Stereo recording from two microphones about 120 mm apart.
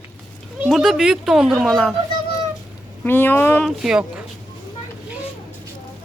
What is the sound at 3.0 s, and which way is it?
Speech, 15° left (ahead or behind).